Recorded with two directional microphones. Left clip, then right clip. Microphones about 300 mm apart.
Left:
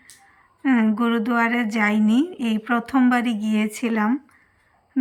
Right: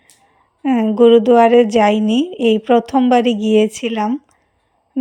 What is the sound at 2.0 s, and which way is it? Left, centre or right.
Speech, centre.